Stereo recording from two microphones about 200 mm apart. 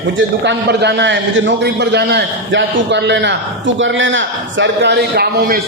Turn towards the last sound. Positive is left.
turn(degrees=-55)  # may be behind; listen again after turning